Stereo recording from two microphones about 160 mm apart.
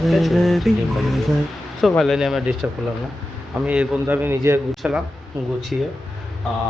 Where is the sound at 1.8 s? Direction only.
5° left (ahead or behind); by 4.6 s 15° right (ahead or behind).